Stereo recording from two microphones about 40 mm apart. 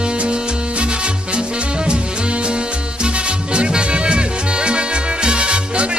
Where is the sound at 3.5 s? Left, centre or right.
Right.